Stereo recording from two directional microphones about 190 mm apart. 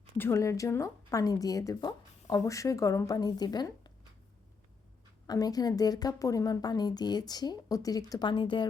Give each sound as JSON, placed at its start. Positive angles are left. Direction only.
{"t": 0.2, "sound": "a woman's voice", "side_deg": 15}
{"t": 5.2, "sound": "a woman's voice", "side_deg": 20}